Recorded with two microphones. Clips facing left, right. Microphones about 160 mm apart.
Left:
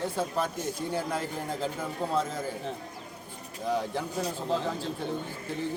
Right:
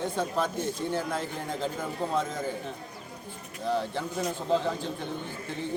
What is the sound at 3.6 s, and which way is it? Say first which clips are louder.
Speech: right 1 dB; 10° left (ahead or behind).